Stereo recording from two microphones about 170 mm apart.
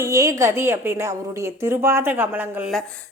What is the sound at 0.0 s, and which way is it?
Speech, 20° right (ahead or behind).